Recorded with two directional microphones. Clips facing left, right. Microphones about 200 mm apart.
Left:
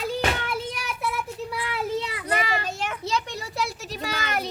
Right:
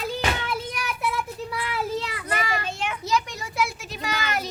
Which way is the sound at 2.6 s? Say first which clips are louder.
Even; 40° left (ahead or behind).